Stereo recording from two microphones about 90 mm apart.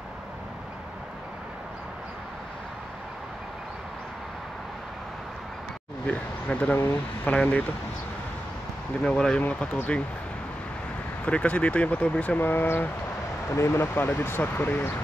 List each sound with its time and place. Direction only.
6.0 s speech: 15° left (ahead or behind)
9.0 s speech: 10° left (ahead or behind)
11.2 s speech: 15° left (ahead or behind)